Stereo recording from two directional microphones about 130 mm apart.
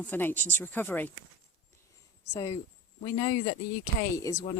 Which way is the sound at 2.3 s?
30° left (ahead or behind).